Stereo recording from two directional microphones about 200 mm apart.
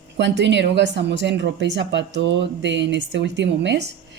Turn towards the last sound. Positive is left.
turn(degrees=-60)  # may be behind; listen again after turning